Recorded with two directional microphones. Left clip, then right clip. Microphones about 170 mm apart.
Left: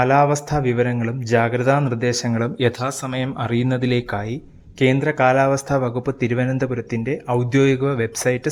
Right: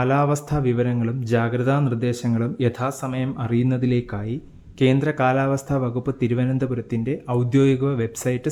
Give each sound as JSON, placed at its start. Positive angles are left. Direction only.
{"t": 0.0, "sound": "a man's voice", "side_deg": 20}
{"t": 4.8, "sound": "a man's voice", "side_deg": 15}